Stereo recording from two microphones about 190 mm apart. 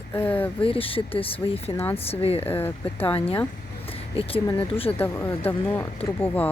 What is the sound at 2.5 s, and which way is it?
Speech, 10° left (ahead or behind).